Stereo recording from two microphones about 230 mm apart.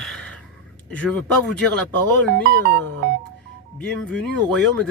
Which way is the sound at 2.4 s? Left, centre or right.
Right.